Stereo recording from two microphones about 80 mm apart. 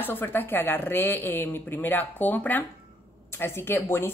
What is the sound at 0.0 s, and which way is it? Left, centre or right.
Speech, left.